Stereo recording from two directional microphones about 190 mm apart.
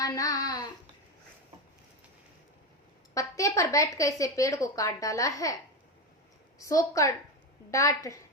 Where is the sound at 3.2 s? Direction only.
15° left (ahead or behind).